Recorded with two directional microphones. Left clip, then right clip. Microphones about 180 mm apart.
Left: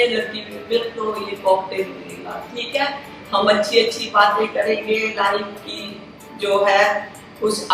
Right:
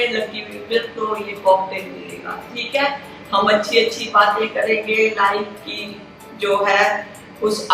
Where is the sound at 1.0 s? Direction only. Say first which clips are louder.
Right 1 dB; 5° right (ahead or behind).